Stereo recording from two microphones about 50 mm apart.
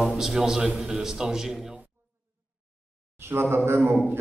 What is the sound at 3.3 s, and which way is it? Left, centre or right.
Speech, right.